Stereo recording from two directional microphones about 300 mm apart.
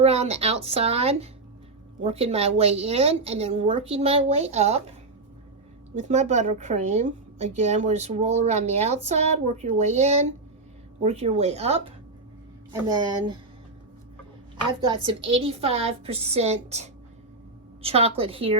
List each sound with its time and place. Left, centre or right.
0.0 s a woman's voice: right
5.9 s a woman's voice: right
14.8 s a woman's voice: centre